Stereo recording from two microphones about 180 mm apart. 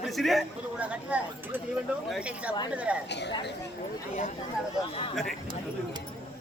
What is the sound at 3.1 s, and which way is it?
Speech, 70° left (ahead or behind).